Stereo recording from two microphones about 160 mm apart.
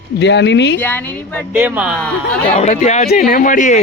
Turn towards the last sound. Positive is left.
turn(degrees=55)  # may be behind; listen again after turning